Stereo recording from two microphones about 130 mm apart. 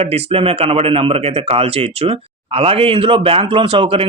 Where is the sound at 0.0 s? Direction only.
50° right (ahead or behind).